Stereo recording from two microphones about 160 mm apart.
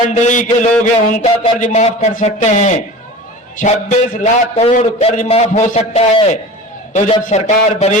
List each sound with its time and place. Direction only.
0.1 s a man's voice: 50° left (ahead or behind)